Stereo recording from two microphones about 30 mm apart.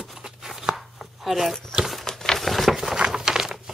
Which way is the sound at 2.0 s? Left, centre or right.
Centre.